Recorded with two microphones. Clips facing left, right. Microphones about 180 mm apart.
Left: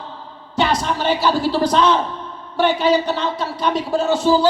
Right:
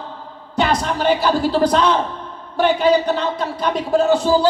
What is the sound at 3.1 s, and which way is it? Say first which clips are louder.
Speech: right 2 dB; 55° right (ahead or behind).